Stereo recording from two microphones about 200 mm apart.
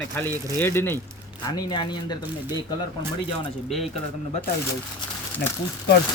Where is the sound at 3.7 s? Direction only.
Centre (ahead or behind).